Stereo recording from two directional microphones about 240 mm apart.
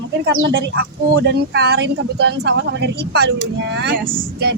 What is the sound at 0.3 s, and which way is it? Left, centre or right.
Speech, right.